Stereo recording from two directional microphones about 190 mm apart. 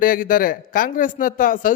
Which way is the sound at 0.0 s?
45° left (ahead or behind).